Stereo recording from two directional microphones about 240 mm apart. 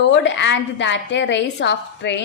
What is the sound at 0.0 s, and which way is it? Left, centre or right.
A woman's voice, left.